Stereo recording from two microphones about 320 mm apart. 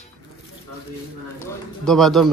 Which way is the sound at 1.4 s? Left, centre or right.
Centre.